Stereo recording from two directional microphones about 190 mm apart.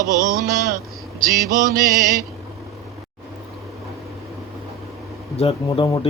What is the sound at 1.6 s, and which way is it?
Music, 50° right (ahead or behind).